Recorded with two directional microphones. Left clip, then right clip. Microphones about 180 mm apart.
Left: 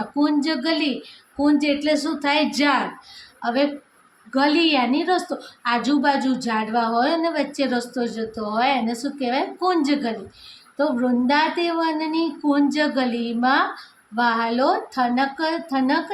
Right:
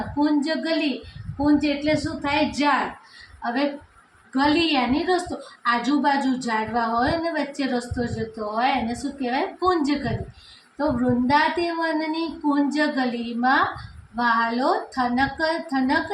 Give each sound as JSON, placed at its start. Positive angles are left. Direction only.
{"t": 0.2, "sound": "a woman's voice", "side_deg": 40}
{"t": 1.5, "sound": "a woman's voice", "side_deg": 50}
{"t": 11.3, "sound": "a woman's voice", "side_deg": 40}